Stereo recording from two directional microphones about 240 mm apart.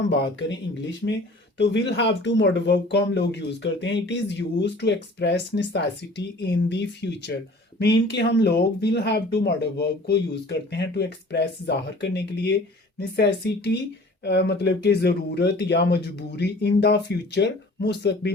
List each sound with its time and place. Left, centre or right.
0.1 s speech: left
1.5 s speech: left